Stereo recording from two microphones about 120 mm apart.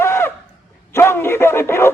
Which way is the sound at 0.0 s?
20° left (ahead or behind).